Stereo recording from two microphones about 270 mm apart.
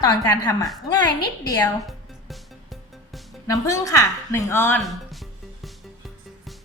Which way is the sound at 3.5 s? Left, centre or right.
Centre.